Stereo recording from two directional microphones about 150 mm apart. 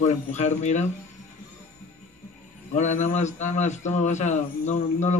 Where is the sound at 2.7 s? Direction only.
55° left (ahead or behind).